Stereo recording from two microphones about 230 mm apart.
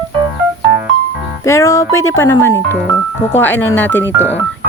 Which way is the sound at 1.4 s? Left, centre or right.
Centre.